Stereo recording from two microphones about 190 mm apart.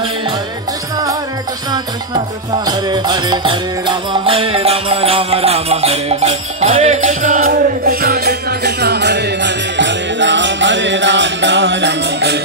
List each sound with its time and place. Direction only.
2.6 s music: 20° right (ahead or behind); by 12.4 s 65° right (ahead or behind)